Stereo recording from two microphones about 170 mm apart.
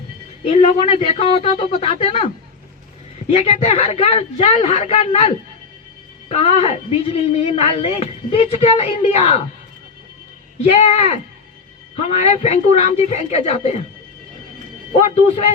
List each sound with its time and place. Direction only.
0.4 s speech: 35° left (ahead or behind)
3.3 s speech: 35° left (ahead or behind)
10.6 s speech: 35° left (ahead or behind)
14.9 s speech: 40° left (ahead or behind)